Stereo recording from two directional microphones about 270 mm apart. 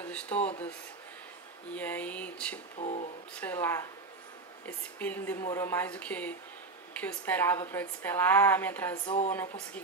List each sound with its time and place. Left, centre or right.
0.0 s a sound: centre
1.7 s speech: centre
2.8 s speech: left
3.3 s a woman's voice: centre
9.0 s speech: centre